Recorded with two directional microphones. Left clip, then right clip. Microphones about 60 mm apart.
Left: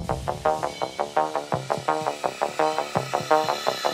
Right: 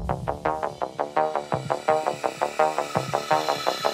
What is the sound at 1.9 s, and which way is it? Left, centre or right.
Music, centre.